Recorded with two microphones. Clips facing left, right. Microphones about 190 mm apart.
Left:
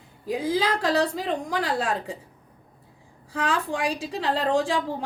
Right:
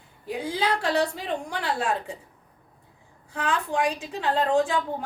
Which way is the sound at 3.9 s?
35° left (ahead or behind).